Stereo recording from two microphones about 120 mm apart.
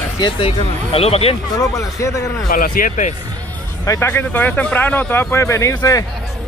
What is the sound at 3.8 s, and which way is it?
Speech, 30° left (ahead or behind).